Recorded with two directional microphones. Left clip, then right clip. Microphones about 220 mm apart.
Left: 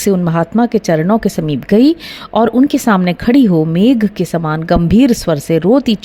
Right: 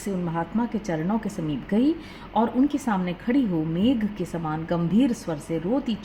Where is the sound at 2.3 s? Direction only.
50° left (ahead or behind).